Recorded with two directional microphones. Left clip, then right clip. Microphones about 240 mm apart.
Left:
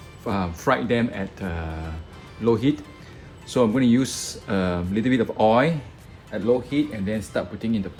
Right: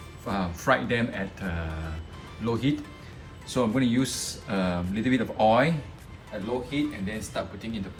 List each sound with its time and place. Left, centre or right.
0.3 s speech: left
6.7 s speech: left